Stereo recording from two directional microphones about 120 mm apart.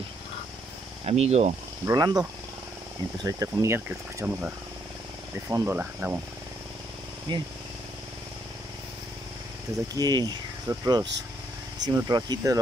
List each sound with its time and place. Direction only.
1.0 s speech: 65° right (ahead or behind)
1.9 s speech: 30° right (ahead or behind)
3.3 s speech: 25° right (ahead or behind)
5.5 s speech: 15° right (ahead or behind)
7.3 s speech: 40° right (ahead or behind)
9.9 s speech: 35° right (ahead or behind)